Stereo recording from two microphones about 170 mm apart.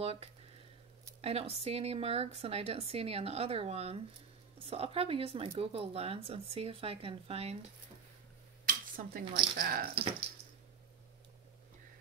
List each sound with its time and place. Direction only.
0.0 s speech: 35° right (ahead or behind)
8.6 s a sound: 60° right (ahead or behind)
9.6 s speech: 60° right (ahead or behind)